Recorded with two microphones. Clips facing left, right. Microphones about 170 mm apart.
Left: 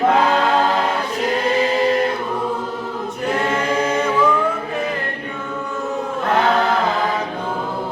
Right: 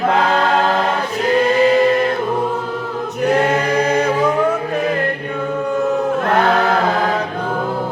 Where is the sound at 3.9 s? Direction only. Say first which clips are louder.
Right 2 dB; 40° right (ahead or behind).